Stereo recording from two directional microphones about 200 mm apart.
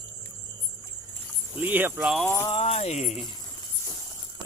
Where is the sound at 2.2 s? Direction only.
15° left (ahead or behind).